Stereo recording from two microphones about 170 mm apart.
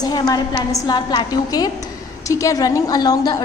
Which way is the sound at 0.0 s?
25° left (ahead or behind).